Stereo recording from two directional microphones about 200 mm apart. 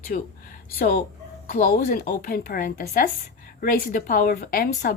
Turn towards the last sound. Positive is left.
turn(degrees=45)  # may be behind; listen again after turning